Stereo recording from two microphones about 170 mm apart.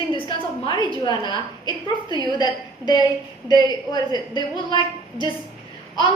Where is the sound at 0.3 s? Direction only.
30° left (ahead or behind).